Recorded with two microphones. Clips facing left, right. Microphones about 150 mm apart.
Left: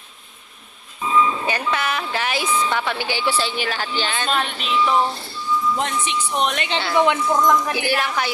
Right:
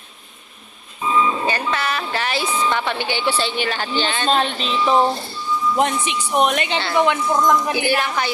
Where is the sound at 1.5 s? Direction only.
15° left (ahead or behind).